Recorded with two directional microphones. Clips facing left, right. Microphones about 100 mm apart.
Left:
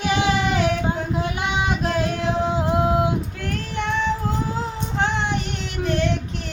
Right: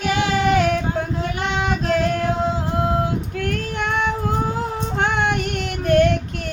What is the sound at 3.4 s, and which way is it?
Child singing, 55° right (ahead or behind).